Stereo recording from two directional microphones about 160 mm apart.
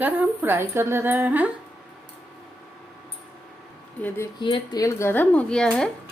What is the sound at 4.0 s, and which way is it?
Speech, 15° left (ahead or behind).